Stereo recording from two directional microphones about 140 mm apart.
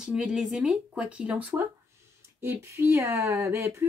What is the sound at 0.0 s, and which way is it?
Speech, 5° right (ahead or behind).